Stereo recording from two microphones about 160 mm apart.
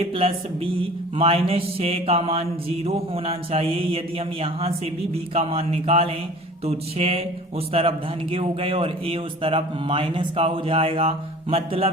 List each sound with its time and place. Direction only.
0.0 s mantra: 40° right (ahead or behind)